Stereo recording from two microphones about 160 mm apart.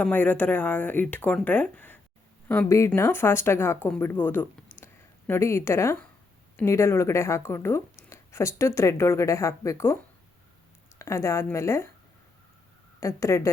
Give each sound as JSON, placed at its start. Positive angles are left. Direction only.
{"t": 0.0, "sound": "speech", "side_deg": 10}
{"t": 13.0, "sound": "speech", "side_deg": 20}